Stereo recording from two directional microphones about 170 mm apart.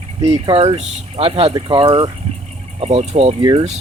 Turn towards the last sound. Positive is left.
turn(degrees=-25)  # may be behind; listen again after turning